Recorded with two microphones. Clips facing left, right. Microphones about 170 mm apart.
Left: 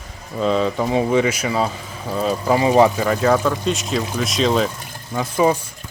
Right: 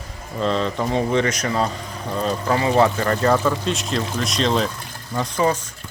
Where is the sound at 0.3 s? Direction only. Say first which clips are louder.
Left 3 dB; 5° left (ahead or behind).